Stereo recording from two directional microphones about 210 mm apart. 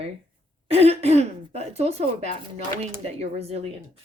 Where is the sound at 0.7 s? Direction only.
30° right (ahead or behind).